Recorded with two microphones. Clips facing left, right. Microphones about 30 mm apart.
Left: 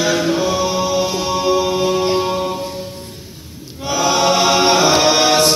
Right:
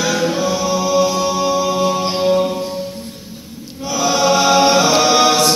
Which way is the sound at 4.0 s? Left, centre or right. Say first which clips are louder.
Even; left.